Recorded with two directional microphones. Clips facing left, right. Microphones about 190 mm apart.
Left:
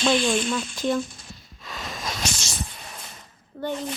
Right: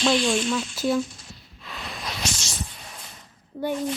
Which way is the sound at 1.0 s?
55° left (ahead or behind).